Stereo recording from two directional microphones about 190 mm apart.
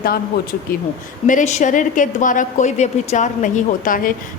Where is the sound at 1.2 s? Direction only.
40° left (ahead or behind).